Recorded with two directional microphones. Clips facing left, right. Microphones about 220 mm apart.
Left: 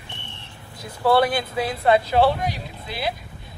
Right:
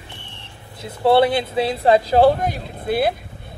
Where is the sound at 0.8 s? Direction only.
25° right (ahead or behind).